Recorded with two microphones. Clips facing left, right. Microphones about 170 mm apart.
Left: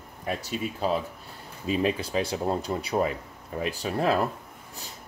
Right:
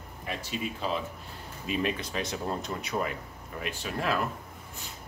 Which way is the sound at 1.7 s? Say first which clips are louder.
Left 5 dB; 30° left (ahead or behind).